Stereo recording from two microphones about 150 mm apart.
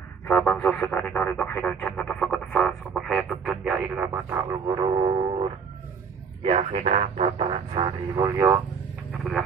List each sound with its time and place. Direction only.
0.3 s a sound: 5° left (ahead or behind)
4.5 s speech: 30° right (ahead or behind)
6.4 s speech: 45° right (ahead or behind)
7.7 s speech: 25° right (ahead or behind)